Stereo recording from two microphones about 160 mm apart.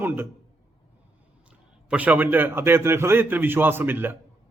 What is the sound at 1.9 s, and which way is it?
Speech, 10° right (ahead or behind).